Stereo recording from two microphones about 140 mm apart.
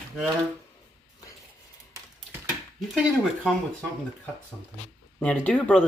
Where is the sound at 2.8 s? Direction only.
Centre (ahead or behind).